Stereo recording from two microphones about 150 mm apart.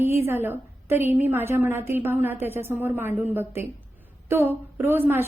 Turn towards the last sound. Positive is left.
turn(degrees=-15)  # may be behind; listen again after turning